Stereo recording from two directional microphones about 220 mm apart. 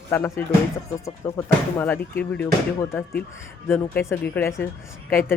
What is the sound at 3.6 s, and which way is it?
A woman's voice, 10° left (ahead or behind).